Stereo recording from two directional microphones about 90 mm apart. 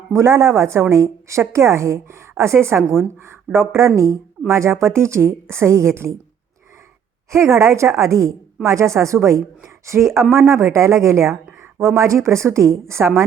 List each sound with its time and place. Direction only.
0.1 s a woman's voice: 30° right (ahead or behind)
7.3 s a woman's voice: 30° right (ahead or behind)